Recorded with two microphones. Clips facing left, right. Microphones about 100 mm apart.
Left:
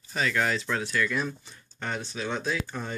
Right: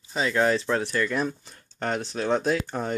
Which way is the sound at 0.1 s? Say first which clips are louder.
Right 4 dB; 25° right (ahead or behind).